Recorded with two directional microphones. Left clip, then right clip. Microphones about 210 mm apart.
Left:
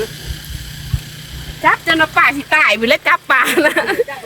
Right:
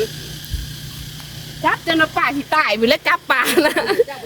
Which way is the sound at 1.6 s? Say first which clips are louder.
Left 4 dB; centre (ahead or behind).